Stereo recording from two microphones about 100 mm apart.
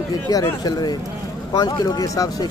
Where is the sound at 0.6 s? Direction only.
40° left (ahead or behind).